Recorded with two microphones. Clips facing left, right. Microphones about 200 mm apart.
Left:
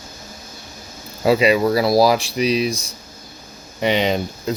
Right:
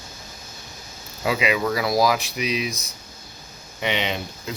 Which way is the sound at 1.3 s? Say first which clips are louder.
Left 7 dB; 35° left (ahead or behind).